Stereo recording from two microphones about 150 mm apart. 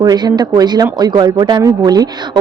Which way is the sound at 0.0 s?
25° right (ahead or behind).